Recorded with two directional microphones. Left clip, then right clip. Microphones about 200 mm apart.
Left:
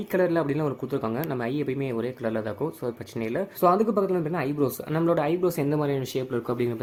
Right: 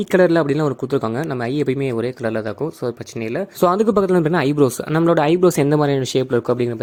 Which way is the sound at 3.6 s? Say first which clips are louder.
Right 6 dB; 40° right (ahead or behind).